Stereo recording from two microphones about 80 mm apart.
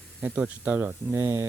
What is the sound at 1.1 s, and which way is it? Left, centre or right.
Speech, right.